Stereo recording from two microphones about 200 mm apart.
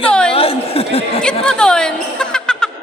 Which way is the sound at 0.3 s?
30° left (ahead or behind).